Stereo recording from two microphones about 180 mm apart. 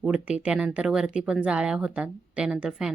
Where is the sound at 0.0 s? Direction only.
5° right (ahead or behind).